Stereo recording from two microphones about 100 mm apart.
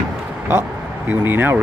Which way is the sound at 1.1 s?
20° right (ahead or behind).